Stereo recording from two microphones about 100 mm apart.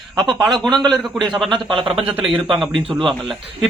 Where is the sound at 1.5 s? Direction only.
55° right (ahead or behind).